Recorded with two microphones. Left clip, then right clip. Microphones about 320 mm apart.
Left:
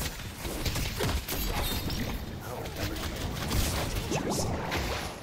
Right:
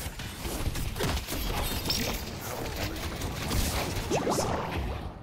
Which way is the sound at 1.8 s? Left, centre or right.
Centre.